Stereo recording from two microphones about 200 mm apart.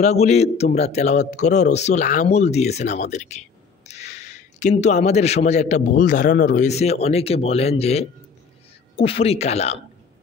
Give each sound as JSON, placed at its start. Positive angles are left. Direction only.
{"t": 0.0, "sound": "a man's voice", "side_deg": 35}